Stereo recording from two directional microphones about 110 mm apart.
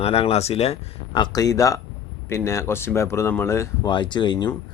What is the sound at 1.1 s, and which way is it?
Speech, 40° left (ahead or behind).